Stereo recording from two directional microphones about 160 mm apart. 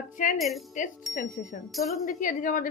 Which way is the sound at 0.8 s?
55° left (ahead or behind).